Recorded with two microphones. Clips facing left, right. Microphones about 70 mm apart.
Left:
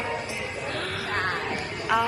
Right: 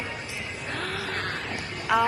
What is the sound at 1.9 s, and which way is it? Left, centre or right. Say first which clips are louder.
Speech: right 1 dB; centre.